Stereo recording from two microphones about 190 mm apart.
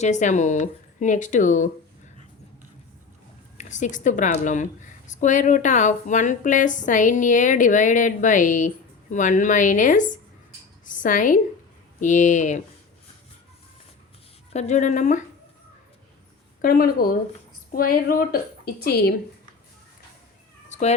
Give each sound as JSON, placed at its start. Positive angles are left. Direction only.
{"t": 0.0, "sound": "a woman's voice", "side_deg": 40}
{"t": 3.6, "sound": "a woman's voice", "side_deg": 40}
{"t": 14.5, "sound": "a woman's voice", "side_deg": 35}
{"t": 16.6, "sound": "a woman's voice", "side_deg": 50}
{"t": 20.7, "sound": "cat", "side_deg": 35}